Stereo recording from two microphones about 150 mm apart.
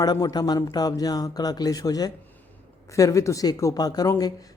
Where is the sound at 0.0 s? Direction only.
25° left (ahead or behind).